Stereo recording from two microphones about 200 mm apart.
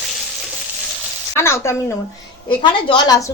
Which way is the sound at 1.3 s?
15° left (ahead or behind).